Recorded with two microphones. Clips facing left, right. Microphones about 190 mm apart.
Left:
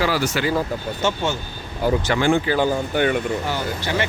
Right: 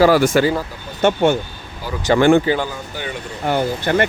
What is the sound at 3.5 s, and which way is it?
Speech, 55° right (ahead or behind).